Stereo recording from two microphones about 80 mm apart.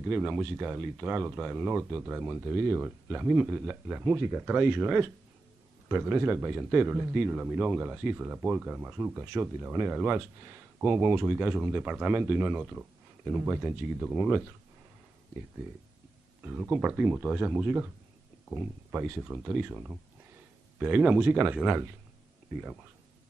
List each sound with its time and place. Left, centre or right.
0.0 s a man's voice: centre
14.1 s speech: centre
16.4 s a man's voice: right
17.2 s a man's voice: centre; by 19.2 s right
19.2 s a man's voice: centre